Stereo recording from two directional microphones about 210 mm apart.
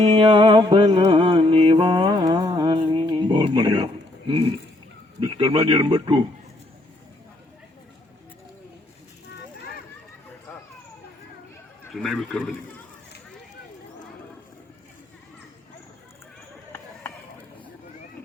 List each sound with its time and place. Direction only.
0.2 s music: 25° right (ahead or behind)
5.2 s speech: 20° right (ahead or behind)
11.9 s a man's voice: centre (ahead or behind)